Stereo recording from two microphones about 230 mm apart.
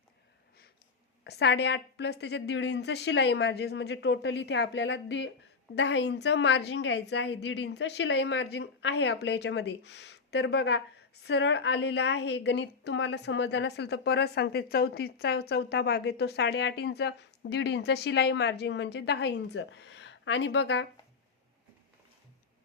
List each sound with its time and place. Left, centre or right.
1.2 s a woman's voice: left